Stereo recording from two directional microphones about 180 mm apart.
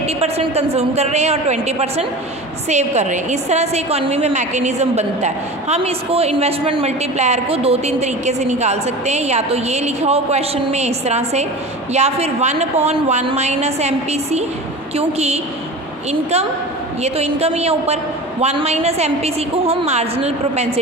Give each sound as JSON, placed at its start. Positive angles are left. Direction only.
{"t": 0.0, "sound": "a woman's voice", "side_deg": -35}